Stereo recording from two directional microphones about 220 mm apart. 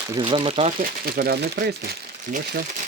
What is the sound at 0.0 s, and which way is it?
Speech, 20° right (ahead or behind).